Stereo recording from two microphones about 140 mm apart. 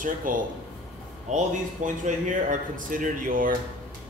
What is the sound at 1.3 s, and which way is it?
Speech, 60° right (ahead or behind).